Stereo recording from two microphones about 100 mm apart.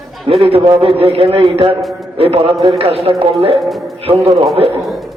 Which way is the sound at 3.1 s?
60° right (ahead or behind).